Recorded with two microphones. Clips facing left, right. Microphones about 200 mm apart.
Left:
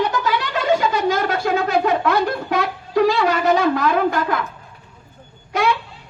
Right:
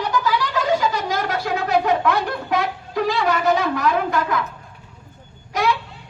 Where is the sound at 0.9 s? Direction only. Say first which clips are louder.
Left 4 dB; 25° left (ahead or behind).